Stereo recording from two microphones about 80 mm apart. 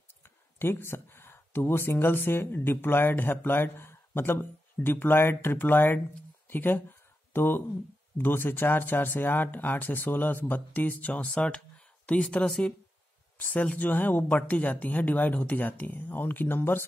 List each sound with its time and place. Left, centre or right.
0.1 s speech: left
6.4 s a sound: left
8.2 s speech: left